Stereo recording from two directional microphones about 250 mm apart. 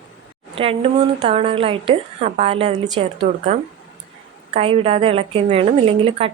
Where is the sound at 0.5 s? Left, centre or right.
Right.